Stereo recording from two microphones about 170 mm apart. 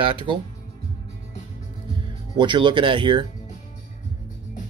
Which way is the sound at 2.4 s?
30° right (ahead or behind).